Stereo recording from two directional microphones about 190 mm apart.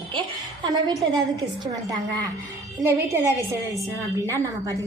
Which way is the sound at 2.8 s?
15° right (ahead or behind).